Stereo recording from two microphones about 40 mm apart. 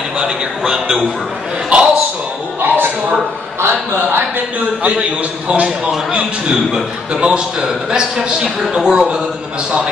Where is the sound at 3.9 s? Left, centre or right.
Right.